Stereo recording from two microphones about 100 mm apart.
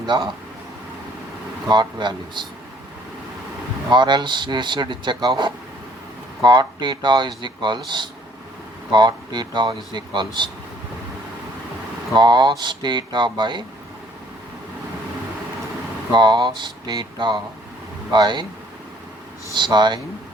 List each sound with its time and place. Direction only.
0.0 s speech: 50° right (ahead or behind)
1.6 s speech: 45° right (ahead or behind)
3.8 s speech: 50° right (ahead or behind)
12.1 s speech: 50° right (ahead or behind)
16.1 s speech: 50° right (ahead or behind)
19.5 s speech: 50° right (ahead or behind)